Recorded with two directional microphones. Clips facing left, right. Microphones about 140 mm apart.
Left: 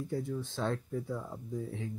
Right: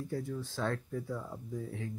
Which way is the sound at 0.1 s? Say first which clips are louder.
Left 2 dB; 20° left (ahead or behind).